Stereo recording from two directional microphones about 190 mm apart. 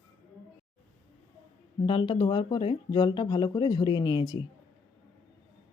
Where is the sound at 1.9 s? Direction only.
25° left (ahead or behind).